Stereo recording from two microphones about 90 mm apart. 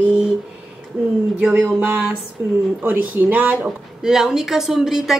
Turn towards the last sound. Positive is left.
turn(degrees=-5)  # may be behind; listen again after turning